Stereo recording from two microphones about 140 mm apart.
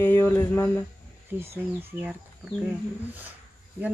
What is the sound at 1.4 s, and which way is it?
Speech, 15° right (ahead or behind).